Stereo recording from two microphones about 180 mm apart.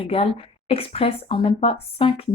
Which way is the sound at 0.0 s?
30° left (ahead or behind).